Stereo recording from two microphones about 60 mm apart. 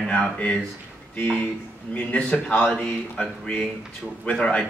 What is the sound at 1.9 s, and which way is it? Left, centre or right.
A man's voice, left.